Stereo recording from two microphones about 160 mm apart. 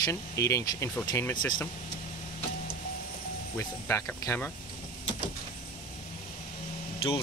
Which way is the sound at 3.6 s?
15° left (ahead or behind).